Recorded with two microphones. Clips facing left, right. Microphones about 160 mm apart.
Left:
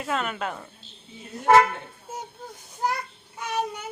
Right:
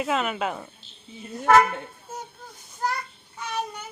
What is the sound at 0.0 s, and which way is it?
Speech, 5° right (ahead or behind).